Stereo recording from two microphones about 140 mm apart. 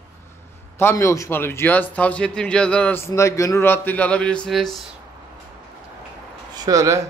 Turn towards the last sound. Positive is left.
turn(degrees=-25)  # may be behind; listen again after turning